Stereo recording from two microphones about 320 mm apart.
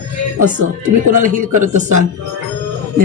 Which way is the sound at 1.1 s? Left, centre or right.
Right.